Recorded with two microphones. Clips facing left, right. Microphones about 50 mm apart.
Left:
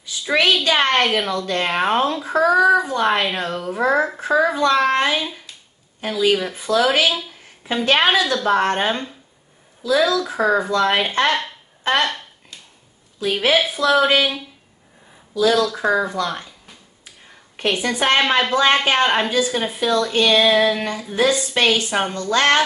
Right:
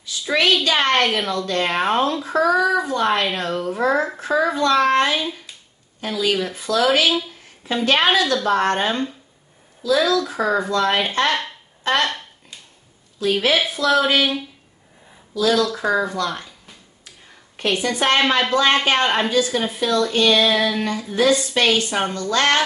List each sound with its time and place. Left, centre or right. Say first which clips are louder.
0.0 s a sound: left 1 dB; centre
0.8 s speech: even; centre
5.9 s speech: left 3 dB; left; by 12.3 s centre
13.2 s speech: left 1 dB; centre
15.3 s speech: left 1 dB; centre
17.7 s speech: even; centre